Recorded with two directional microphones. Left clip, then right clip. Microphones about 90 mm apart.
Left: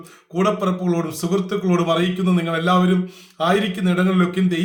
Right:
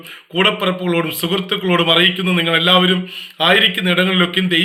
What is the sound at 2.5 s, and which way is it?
A man's voice, 35° left (ahead or behind).